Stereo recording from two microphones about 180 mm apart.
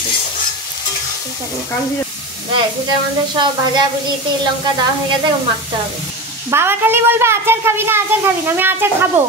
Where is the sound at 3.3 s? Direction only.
25° right (ahead or behind).